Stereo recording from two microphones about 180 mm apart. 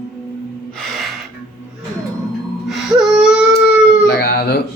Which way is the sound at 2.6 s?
5° right (ahead or behind).